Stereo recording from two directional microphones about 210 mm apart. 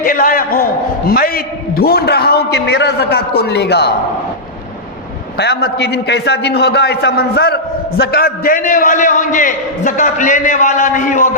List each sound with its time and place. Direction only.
0.0 s a man's voice: 45° left (ahead or behind)
5.4 s a man's voice: 50° left (ahead or behind)